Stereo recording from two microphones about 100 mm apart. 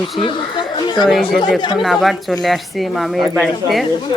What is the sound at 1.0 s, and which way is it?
Speech, centre (ahead or behind).